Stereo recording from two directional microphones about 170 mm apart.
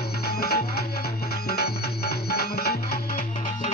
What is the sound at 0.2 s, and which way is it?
Music, 70° left (ahead or behind).